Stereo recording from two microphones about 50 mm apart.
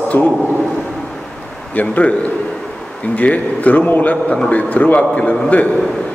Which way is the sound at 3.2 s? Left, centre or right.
Left.